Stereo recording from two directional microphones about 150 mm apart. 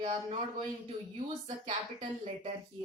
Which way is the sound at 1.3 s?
45° right (ahead or behind).